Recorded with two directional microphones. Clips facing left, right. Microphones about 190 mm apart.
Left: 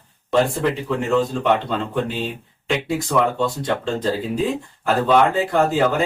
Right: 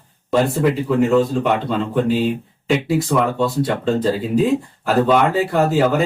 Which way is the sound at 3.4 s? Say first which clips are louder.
Right 3 dB; 5° right (ahead or behind).